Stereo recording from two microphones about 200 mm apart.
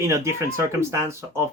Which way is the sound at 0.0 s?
15° right (ahead or behind).